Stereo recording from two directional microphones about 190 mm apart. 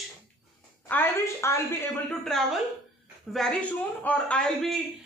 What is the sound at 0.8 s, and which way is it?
A man's voice, 10° left (ahead or behind).